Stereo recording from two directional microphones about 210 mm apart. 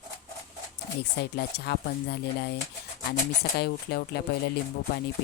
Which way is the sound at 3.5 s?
50° left (ahead or behind).